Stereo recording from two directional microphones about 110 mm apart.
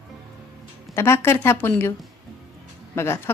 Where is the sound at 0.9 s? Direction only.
20° left (ahead or behind).